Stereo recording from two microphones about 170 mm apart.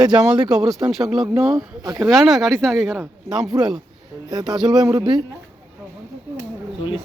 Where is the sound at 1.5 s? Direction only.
20° right (ahead or behind).